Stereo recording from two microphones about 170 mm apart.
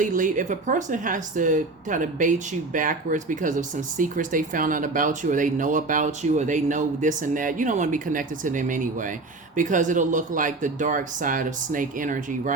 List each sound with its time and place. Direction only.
0.0 s speech: 50° right (ahead or behind)